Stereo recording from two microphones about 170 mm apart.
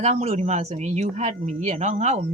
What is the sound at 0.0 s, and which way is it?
Speech, 40° right (ahead or behind).